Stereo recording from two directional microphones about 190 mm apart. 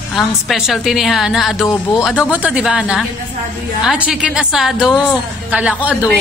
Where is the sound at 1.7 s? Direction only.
15° left (ahead or behind).